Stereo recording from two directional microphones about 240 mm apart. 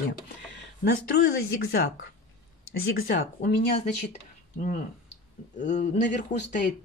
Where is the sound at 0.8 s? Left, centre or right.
Left.